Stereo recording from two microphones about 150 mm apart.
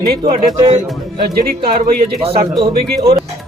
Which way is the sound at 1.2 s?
75° right (ahead or behind).